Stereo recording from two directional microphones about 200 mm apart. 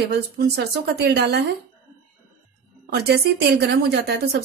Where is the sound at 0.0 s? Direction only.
55° right (ahead or behind).